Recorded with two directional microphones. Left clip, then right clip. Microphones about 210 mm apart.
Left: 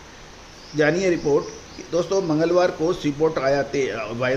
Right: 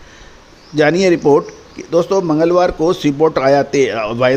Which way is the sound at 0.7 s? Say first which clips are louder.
Right 7 dB; 55° right (ahead or behind).